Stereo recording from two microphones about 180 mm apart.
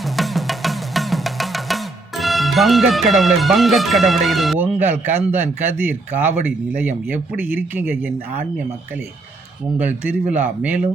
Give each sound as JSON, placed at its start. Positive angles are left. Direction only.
{"t": 0.2, "sound": "music", "side_deg": 0}
{"t": 6.8, "sound": "speech", "side_deg": -10}
{"t": 9.7, "sound": "speech", "side_deg": -10}